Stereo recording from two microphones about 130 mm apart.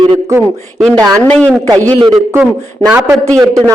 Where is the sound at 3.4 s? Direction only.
25° right (ahead or behind).